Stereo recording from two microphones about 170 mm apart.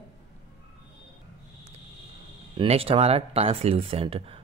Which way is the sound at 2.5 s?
35° right (ahead or behind).